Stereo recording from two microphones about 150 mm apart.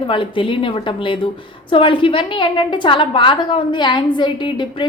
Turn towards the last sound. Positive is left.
turn(degrees=30)  # may be behind; listen again after turning